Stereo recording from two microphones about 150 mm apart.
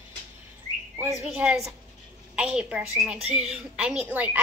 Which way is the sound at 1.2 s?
10° right (ahead or behind).